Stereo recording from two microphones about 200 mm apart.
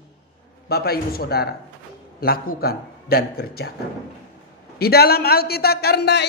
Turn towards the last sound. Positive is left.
turn(degrees=55)  # may be behind; listen again after turning